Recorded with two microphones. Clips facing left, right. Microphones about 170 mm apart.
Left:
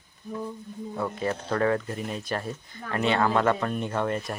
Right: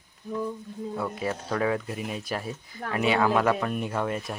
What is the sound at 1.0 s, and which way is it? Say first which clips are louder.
Speech: left 3 dB; 5° right (ahead or behind).